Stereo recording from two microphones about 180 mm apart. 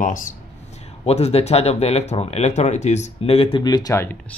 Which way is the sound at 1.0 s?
35° left (ahead or behind).